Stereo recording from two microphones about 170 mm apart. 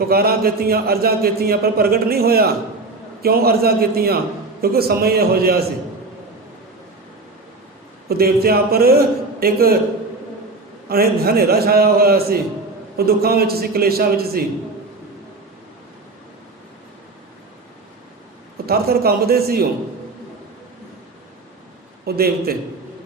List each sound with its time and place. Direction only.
0.0 s a man's voice: 65° right (ahead or behind)
8.0 s a man's voice: 65° right (ahead or behind)
10.8 s a man's voice: 65° right (ahead or behind)
18.5 s a man's voice: 65° right (ahead or behind)
22.0 s a man's voice: 65° right (ahead or behind)